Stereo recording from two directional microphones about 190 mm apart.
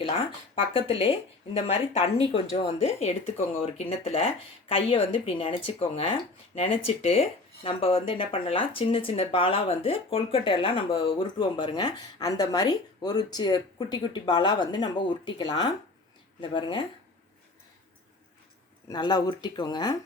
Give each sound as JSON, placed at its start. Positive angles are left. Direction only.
{"t": 0.6, "sound": "speech", "side_deg": 30}
{"t": 18.9, "sound": "speech", "side_deg": 20}